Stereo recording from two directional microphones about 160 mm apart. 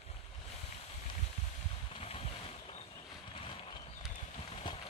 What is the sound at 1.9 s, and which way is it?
Vehicle, 40° left (ahead or behind).